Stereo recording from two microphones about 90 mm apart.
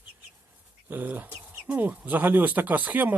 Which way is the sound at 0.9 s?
20° right (ahead or behind).